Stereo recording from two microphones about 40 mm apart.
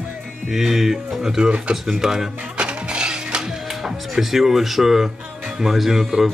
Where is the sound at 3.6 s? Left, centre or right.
Centre.